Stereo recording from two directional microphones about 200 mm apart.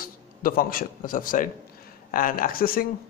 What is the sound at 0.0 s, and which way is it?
A man's voice, 45° left (ahead or behind).